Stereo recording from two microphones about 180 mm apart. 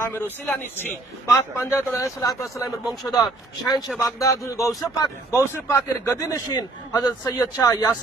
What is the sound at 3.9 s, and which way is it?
A man's voice, 20° left (ahead or behind).